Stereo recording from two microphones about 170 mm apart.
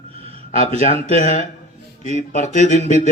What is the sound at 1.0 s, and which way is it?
Speech, 50° left (ahead or behind).